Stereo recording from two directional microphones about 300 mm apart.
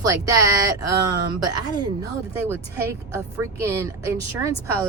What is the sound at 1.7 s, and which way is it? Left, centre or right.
Speech, centre.